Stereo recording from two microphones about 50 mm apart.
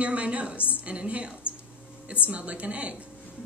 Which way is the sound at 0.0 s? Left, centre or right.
Right.